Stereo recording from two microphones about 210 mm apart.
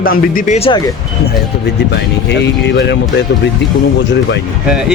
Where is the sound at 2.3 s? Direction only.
55° left (ahead or behind).